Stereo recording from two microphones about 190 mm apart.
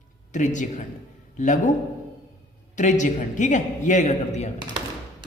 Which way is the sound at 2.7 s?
40° left (ahead or behind).